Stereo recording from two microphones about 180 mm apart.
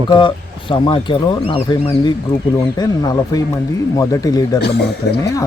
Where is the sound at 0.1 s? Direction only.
25° left (ahead or behind).